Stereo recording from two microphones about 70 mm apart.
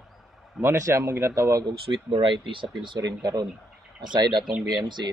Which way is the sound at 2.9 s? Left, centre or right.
Right.